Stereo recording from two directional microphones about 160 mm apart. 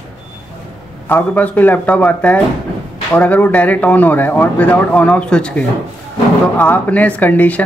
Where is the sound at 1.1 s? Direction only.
10° left (ahead or behind).